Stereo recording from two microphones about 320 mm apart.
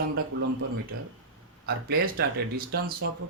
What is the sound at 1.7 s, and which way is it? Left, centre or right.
Speech, right.